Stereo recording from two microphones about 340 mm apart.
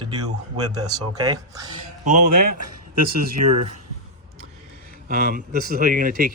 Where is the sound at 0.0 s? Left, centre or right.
Centre.